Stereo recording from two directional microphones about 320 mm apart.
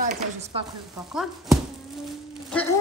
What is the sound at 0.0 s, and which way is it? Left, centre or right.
Speech, right.